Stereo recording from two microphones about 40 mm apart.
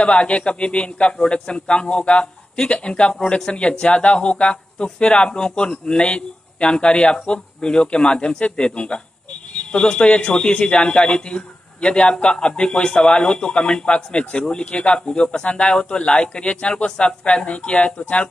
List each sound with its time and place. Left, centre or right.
0.0 s speech: left
15.0 s speech: centre